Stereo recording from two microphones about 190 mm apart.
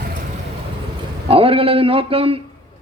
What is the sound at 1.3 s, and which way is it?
A man's voice, 30° right (ahead or behind).